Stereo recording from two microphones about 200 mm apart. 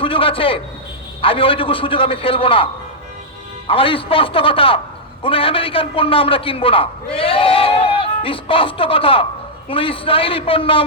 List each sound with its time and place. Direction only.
0.0 s a man's voice: 25° left (ahead or behind)
3.7 s a man's voice: 25° left (ahead or behind)